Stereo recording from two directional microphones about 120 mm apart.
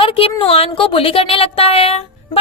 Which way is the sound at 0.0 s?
50° left (ahead or behind).